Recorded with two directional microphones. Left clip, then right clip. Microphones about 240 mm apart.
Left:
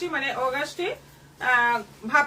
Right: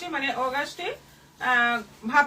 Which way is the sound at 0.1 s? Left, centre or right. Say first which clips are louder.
Right 2 dB; centre.